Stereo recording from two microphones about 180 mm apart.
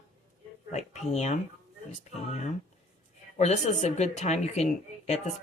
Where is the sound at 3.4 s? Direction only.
40° left (ahead or behind).